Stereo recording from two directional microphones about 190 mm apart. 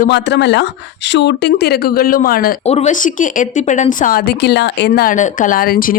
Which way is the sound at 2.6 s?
35° left (ahead or behind).